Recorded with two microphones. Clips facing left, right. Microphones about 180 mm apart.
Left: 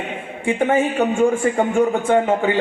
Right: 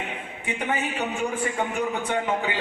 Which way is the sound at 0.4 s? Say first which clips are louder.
Left 11 dB; 50° left (ahead or behind).